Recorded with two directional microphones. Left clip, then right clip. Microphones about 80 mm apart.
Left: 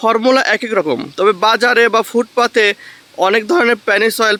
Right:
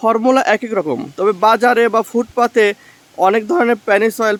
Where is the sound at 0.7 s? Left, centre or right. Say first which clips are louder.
Left 3 dB; centre.